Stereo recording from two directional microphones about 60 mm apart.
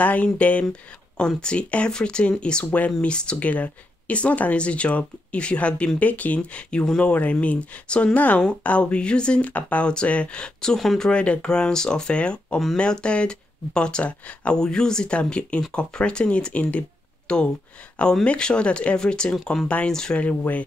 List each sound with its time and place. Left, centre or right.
0.0 s speech: left; by 11.1 s centre
11.1 s speech: centre
20.2 s speech: left